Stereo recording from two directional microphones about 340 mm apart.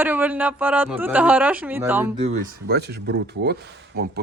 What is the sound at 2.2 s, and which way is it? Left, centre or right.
Speech, right.